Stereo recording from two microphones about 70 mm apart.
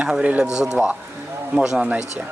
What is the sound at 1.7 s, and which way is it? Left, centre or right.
Speech, right.